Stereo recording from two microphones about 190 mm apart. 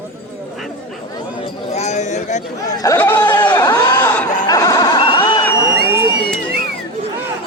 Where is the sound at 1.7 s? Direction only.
35° left (ahead or behind).